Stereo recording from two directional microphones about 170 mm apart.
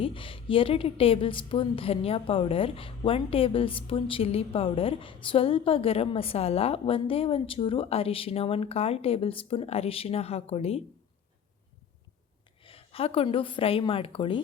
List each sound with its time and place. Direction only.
0.0 s a woman's voice: 30° left (ahead or behind)
12.6 s a woman's voice: 35° left (ahead or behind)